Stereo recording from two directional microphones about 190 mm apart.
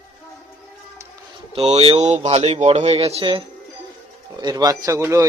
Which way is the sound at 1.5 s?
35° right (ahead or behind).